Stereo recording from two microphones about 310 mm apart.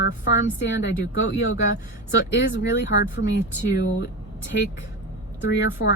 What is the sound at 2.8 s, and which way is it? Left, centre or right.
Speech, left.